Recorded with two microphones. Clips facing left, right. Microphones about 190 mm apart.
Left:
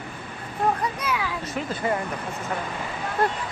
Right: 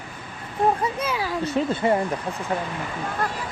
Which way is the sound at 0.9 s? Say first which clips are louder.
Right 2 dB; 25° right (ahead or behind).